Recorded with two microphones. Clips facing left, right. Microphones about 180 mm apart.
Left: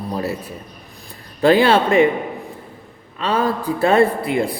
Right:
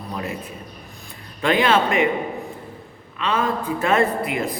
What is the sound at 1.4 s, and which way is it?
Speech, 35° left (ahead or behind).